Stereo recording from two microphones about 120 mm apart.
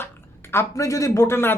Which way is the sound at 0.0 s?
20° left (ahead or behind).